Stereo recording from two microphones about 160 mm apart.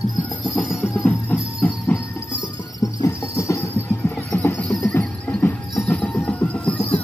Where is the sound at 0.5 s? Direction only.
Centre (ahead or behind).